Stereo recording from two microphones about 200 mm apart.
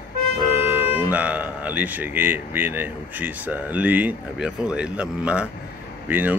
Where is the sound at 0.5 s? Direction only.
10° right (ahead or behind).